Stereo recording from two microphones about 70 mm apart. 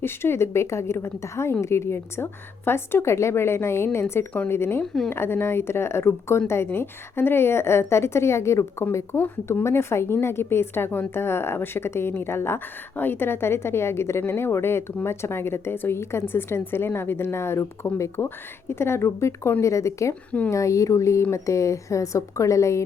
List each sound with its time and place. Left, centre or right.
0.0 s a woman's voice: left